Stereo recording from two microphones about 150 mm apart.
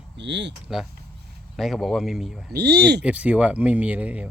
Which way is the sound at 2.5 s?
90° right.